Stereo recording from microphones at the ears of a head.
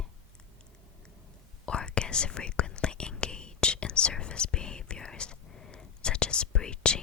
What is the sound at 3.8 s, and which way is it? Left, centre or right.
Speech, left.